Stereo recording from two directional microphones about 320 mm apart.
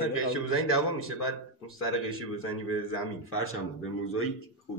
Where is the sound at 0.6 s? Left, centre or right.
Left.